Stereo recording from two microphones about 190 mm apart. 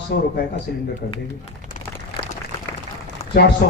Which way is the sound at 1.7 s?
50° left (ahead or behind).